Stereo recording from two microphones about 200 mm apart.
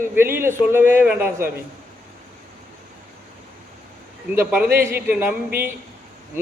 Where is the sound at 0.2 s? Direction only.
10° right (ahead or behind).